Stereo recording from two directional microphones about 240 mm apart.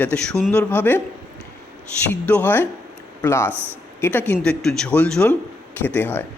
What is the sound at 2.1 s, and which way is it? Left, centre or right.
A man's voice, centre.